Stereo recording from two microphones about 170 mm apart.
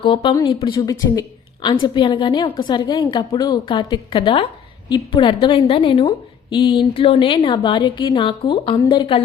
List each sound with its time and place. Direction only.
0.0 s a woman's voice: 30° left (ahead or behind)